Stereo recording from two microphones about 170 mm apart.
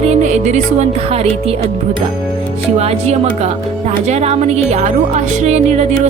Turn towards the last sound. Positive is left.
turn(degrees=-40)  # may be behind; listen again after turning